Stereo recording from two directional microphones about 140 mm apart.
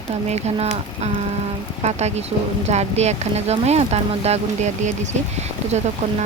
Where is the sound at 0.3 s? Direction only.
50° right (ahead or behind).